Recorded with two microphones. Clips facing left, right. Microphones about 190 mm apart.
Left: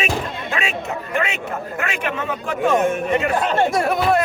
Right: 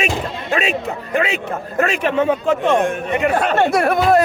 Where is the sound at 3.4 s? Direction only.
65° right (ahead or behind).